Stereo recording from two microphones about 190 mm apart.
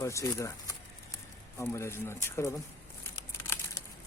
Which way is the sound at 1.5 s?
15° left (ahead or behind).